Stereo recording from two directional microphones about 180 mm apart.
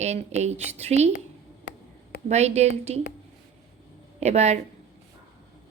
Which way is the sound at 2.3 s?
40° right (ahead or behind).